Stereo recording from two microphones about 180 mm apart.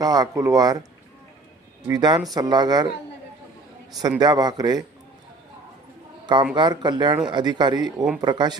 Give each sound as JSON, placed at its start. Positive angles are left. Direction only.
{"t": 0.0, "sound": "speech", "side_deg": -20}
{"t": 1.9, "sound": "speech", "side_deg": -25}
{"t": 4.2, "sound": "speech", "side_deg": -25}
{"t": 6.5, "sound": "speech", "side_deg": -25}